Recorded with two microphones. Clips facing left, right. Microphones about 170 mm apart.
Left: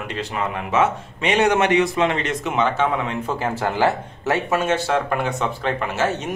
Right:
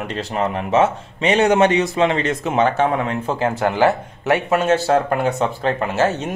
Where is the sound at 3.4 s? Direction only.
20° right (ahead or behind).